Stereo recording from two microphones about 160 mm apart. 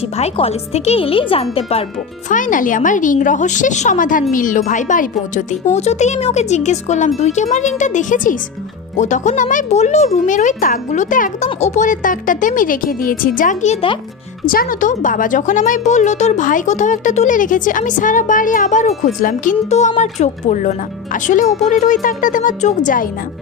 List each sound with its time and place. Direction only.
0.2 s speech: 40° left (ahead or behind)
2.3 s speech: 55° left (ahead or behind)
14.4 s speech: 60° left (ahead or behind)